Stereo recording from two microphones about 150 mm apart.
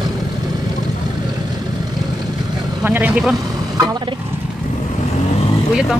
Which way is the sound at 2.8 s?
10° right (ahead or behind).